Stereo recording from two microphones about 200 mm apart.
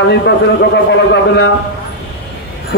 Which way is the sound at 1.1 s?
60° left (ahead or behind).